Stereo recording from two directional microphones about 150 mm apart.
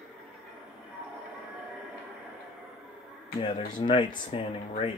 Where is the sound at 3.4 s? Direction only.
35° left (ahead or behind).